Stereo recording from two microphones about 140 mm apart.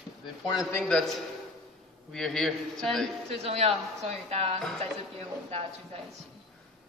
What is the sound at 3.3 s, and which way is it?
A woman's voice, 45° right (ahead or behind).